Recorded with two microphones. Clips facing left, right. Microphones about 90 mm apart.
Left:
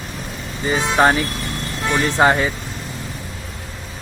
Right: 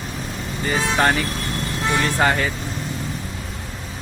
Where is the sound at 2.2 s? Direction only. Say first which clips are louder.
Left 6 dB; 20° left (ahead or behind).